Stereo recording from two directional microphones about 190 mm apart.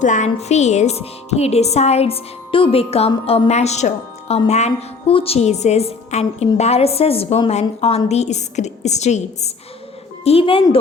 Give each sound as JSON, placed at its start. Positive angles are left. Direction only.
{"t": 0.0, "sound": "a woman's voice", "side_deg": 40}